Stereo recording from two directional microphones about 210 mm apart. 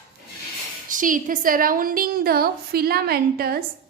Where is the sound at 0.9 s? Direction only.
40° right (ahead or behind).